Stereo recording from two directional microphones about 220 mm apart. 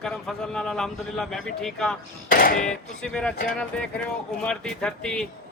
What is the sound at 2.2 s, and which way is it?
Speech, 40° left (ahead or behind).